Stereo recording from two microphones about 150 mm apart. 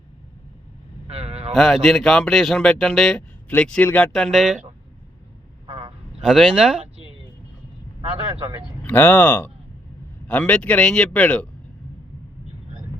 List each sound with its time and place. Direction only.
1.0 s vehicle: 45° right (ahead or behind)
1.5 s speech: centre (ahead or behind)
5.6 s a sound: 35° right (ahead or behind)
6.1 s speech: 5° right (ahead or behind)
6.9 s vehicle: 40° right (ahead or behind)
8.1 s speech: 35° right (ahead or behind)
8.8 s speech: 10° left (ahead or behind)